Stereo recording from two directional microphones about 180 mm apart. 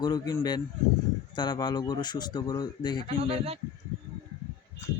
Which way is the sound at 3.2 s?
35° right (ahead or behind).